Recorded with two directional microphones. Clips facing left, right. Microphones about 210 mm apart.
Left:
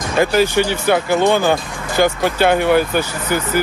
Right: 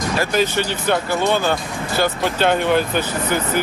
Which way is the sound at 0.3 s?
10° left (ahead or behind).